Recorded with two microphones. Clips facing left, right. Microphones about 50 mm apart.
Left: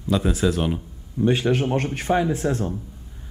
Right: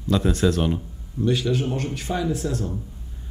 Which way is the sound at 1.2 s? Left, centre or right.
Left.